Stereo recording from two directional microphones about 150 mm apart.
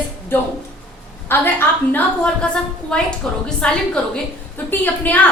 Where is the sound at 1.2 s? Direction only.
15° left (ahead or behind).